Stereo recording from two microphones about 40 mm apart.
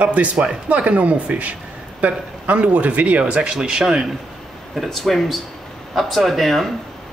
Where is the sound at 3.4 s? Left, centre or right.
Centre.